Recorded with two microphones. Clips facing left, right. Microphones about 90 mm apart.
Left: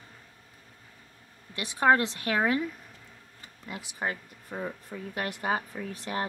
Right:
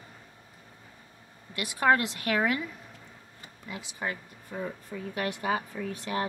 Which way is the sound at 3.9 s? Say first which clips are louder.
Left 2 dB; 35° left (ahead or behind).